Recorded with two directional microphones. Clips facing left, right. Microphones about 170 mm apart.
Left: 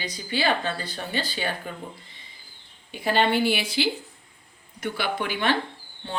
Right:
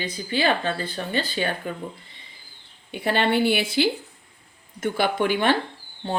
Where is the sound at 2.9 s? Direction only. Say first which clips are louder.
Even; 55° right (ahead or behind).